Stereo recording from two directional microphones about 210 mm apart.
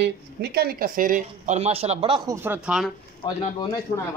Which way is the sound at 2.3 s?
10° right (ahead or behind).